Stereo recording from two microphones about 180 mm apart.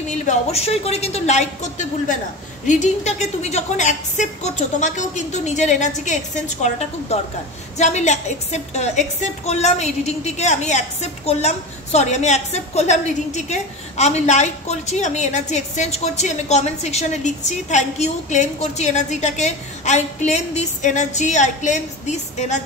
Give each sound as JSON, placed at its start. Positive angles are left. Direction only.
{"t": 0.1, "sound": "a woman's voice", "side_deg": 40}